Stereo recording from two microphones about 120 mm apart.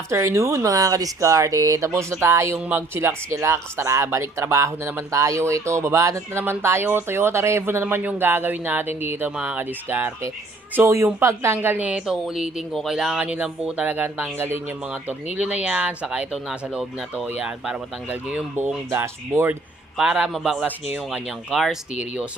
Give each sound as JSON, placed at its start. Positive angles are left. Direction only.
{"t": 0.1, "sound": "speech", "side_deg": -25}
{"t": 10.8, "sound": "speech", "side_deg": -25}
{"t": 20.0, "sound": "speech", "side_deg": -10}